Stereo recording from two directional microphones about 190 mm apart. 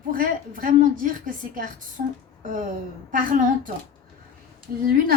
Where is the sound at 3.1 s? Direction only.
45° right (ahead or behind).